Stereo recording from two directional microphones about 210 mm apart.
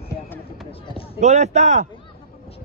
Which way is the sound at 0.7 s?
25° left (ahead or behind).